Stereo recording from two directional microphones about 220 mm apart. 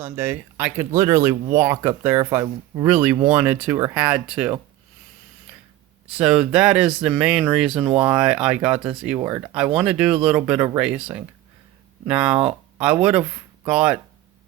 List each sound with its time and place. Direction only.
0.0 s speech: 10° right (ahead or behind)
6.1 s speech: 5° right (ahead or behind)
9.1 s speech: 15° right (ahead or behind)
9.6 s speech: 5° right (ahead or behind)